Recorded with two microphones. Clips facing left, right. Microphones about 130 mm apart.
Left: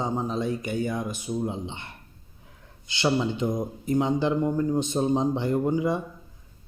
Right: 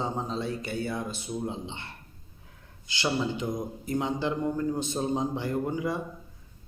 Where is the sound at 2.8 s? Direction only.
20° left (ahead or behind).